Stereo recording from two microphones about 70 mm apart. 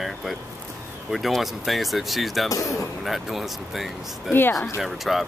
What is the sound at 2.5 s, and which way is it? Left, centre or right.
Speech, left.